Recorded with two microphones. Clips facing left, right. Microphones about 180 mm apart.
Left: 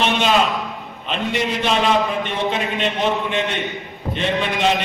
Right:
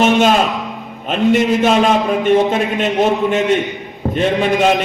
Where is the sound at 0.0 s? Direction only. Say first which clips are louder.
Right 6 dB; 45° right (ahead or behind).